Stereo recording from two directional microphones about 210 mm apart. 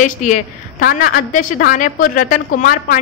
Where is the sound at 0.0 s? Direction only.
40° left (ahead or behind).